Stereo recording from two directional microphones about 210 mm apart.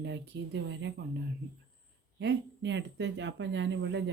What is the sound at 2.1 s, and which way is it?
Speech, 60° right (ahead or behind).